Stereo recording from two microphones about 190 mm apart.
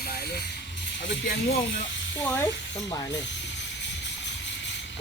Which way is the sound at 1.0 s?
70° left (ahead or behind).